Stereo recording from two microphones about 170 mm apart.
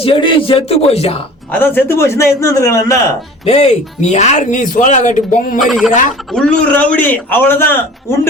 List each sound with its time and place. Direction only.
0.0 s a man's voice: 30° left (ahead or behind)
1.5 s a man's voice: 10° left (ahead or behind)
3.4 s speech: 40° left (ahead or behind)
5.5 s speech: centre (ahead or behind)
5.9 s speech: 50° left (ahead or behind)
6.3 s a man's voice: 5° left (ahead or behind)